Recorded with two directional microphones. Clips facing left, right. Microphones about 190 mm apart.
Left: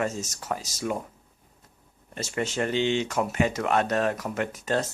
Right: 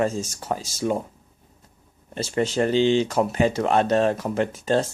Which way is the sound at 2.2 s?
30° right (ahead or behind).